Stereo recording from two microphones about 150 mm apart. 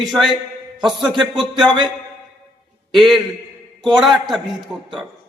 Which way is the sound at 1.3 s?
30° right (ahead or behind).